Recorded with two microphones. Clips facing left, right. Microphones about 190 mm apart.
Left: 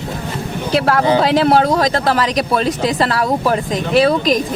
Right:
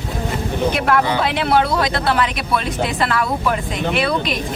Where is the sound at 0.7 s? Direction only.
35° left (ahead or behind).